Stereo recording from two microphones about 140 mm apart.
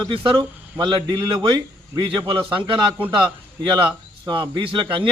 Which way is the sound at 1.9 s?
30° right (ahead or behind).